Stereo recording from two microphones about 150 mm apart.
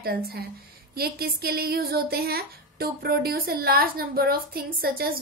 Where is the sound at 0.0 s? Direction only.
90° right.